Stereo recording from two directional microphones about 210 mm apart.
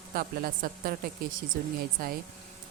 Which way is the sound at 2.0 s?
45° right (ahead or behind).